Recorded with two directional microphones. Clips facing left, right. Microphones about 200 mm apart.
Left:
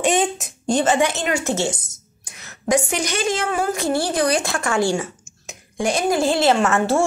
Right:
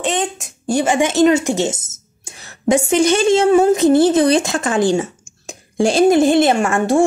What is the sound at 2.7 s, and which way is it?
A woman's voice, 25° right (ahead or behind).